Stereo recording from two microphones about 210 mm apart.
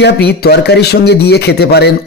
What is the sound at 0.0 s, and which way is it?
Speech, 50° left (ahead or behind).